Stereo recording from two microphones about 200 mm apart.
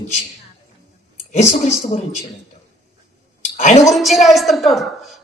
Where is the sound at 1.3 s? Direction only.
35° left (ahead or behind).